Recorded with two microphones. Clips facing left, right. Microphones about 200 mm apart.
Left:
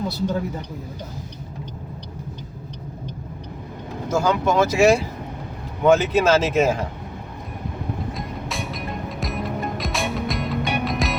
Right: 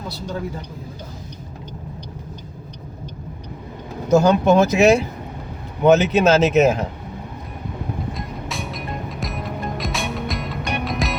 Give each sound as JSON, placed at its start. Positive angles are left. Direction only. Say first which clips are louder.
{"t": 4.1, "sound": "speech", "louder": "right 6 dB", "side_deg": -25}
{"t": 8.1, "sound": "music", "louder": "even", "side_deg": 0}